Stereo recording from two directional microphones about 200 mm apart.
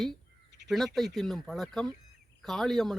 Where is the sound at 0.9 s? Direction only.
Centre (ahead or behind).